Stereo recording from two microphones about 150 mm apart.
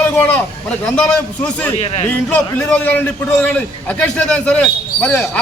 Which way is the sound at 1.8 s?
40° left (ahead or behind).